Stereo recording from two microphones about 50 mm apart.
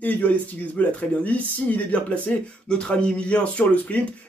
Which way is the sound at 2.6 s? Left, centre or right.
Centre.